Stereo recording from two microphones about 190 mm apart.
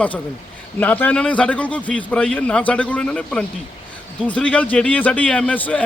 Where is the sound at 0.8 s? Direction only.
10° left (ahead or behind).